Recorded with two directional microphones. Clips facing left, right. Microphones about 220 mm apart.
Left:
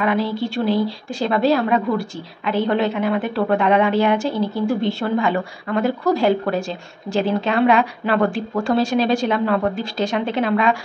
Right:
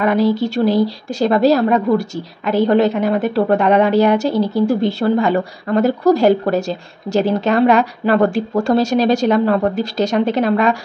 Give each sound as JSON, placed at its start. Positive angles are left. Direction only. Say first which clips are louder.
{"t": 0.0, "sound": "a woman's voice", "louder": "right 5 dB", "side_deg": -40}